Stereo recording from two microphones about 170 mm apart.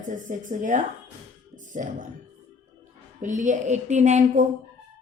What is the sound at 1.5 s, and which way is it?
Music, 50° right (ahead or behind).